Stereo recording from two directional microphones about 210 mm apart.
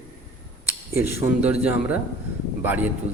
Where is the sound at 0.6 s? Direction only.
5° right (ahead or behind).